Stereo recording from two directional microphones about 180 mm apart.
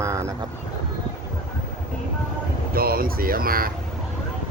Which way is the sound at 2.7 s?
55° right (ahead or behind).